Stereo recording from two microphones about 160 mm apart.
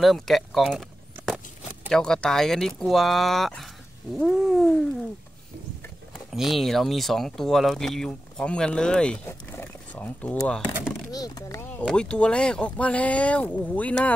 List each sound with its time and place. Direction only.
0.0 s a sound: centre (ahead or behind)
1.9 s speech: 5° left (ahead or behind)
4.2 s cat: centre (ahead or behind)
6.3 s speech: centre (ahead or behind)
11.1 s speech: 25° left (ahead or behind)